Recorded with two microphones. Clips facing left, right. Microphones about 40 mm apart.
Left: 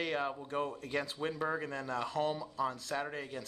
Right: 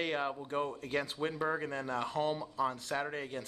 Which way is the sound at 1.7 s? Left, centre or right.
Right.